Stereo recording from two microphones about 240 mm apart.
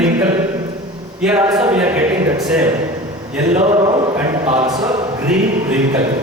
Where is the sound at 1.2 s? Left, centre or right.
Centre.